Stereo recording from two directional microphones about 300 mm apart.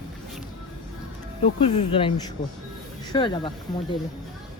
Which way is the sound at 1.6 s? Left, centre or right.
Centre.